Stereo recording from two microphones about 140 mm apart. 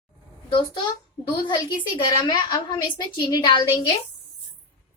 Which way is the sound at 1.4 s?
35° left (ahead or behind).